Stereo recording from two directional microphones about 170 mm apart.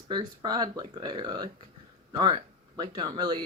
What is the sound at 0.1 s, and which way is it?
Speech, 25° right (ahead or behind).